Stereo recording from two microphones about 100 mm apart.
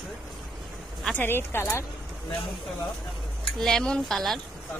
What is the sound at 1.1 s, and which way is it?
Speech, 25° left (ahead or behind).